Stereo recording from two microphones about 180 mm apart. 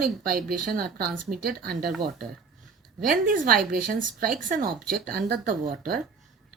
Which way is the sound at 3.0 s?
50° right (ahead or behind).